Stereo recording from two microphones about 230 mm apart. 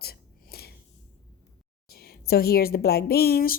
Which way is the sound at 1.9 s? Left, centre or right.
Left.